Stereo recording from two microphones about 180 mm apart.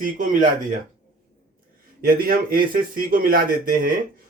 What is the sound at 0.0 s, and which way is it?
Speech, 45° right (ahead or behind).